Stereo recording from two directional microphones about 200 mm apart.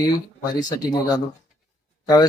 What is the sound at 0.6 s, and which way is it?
Speech, 20° left (ahead or behind).